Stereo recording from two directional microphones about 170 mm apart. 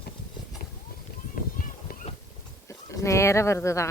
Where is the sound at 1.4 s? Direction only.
55° left (ahead or behind).